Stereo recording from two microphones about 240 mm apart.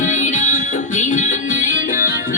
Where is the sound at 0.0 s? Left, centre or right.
Left.